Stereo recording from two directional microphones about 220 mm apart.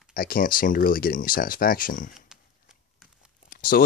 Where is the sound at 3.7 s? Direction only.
45° left (ahead or behind).